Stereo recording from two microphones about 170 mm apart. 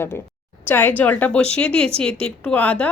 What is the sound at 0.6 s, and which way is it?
Speech, 10° left (ahead or behind).